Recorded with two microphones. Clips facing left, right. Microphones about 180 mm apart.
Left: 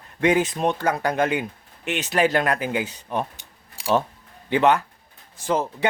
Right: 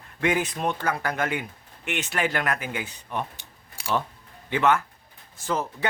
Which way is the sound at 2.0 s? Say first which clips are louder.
Left 7 dB; 40° left (ahead or behind).